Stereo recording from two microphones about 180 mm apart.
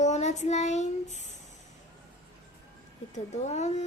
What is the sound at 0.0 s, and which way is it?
Child singing, 40° left (ahead or behind).